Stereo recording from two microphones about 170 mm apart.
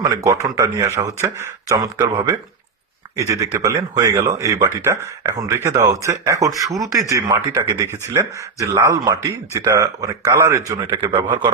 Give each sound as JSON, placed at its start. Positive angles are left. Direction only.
{"t": 0.0, "sound": "speech", "side_deg": -20}